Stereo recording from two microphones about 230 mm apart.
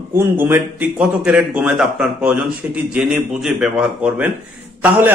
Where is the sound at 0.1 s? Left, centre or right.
Centre.